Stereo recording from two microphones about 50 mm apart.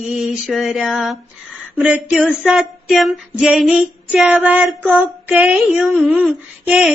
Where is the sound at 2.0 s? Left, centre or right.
Centre.